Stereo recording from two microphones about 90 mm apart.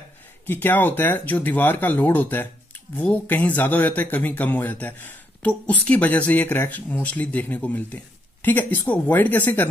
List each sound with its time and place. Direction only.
0.5 s speech: 20° left (ahead or behind)